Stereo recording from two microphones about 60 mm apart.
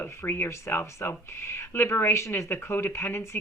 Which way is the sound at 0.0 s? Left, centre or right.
Left.